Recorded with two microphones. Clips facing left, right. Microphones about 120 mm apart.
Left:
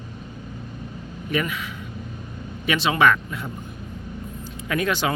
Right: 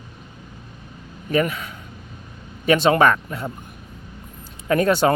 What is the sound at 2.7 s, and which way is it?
Speech, 45° right (ahead or behind).